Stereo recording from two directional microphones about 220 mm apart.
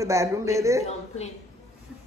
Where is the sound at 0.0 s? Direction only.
15° right (ahead or behind).